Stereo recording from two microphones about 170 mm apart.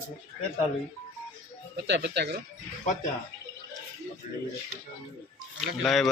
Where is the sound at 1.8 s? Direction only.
85° right.